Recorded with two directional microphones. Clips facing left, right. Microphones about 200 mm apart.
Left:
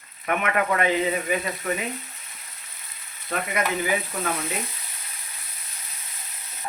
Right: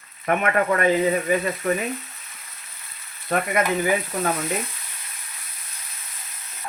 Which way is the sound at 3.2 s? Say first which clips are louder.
Right 5 dB; 50° right (ahead or behind).